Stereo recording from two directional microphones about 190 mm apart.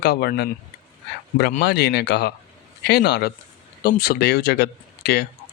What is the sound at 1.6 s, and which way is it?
Speech, 60° left (ahead or behind).